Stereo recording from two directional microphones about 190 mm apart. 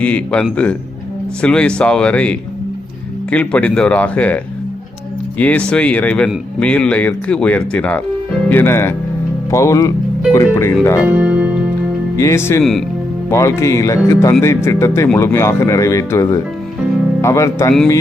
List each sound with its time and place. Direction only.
0.0 s speech: 5° left (ahead or behind)
5.4 s speech: 5° left (ahead or behind)
11.2 s music: 5° right (ahead or behind)
12.1 s speech: 15° left (ahead or behind)